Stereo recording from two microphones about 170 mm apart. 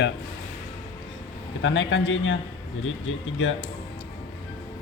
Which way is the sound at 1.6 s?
90° left.